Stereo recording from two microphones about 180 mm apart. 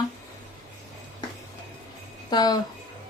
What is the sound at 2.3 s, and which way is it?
Speech, 20° left (ahead or behind).